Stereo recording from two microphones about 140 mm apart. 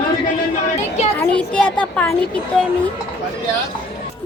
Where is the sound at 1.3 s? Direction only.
5° left (ahead or behind).